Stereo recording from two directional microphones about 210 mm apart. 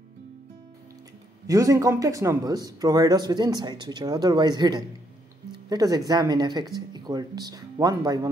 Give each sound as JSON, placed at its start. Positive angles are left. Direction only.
{"t": 1.5, "sound": "speech", "side_deg": -15}